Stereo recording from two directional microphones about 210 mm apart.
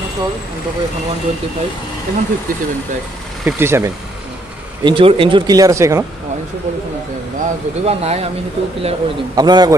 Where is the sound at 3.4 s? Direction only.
10° right (ahead or behind).